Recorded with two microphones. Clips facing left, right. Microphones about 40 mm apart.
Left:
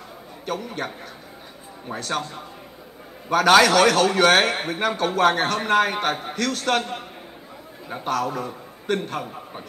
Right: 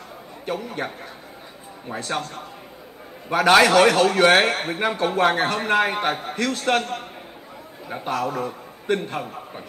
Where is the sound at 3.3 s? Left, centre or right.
Centre.